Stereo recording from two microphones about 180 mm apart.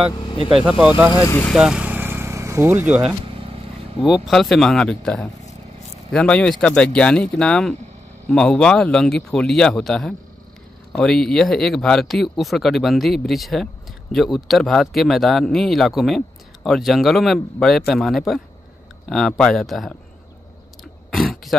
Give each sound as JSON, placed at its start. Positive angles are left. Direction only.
{"t": 0.1, "sound": "speech", "side_deg": 25}
{"t": 0.7, "sound": "speech", "side_deg": -5}
{"t": 1.2, "sound": "speech", "side_deg": 15}
{"t": 1.5, "sound": "vehicle", "side_deg": -5}
{"t": 3.3, "sound": "vehicle", "side_deg": -30}
{"t": 4.0, "sound": "speech", "side_deg": 0}
{"t": 21.1, "sound": "a sound", "side_deg": 0}